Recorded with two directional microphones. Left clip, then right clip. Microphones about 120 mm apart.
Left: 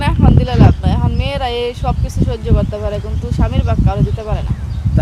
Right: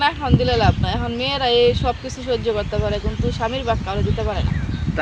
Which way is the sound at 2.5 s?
35° left (ahead or behind).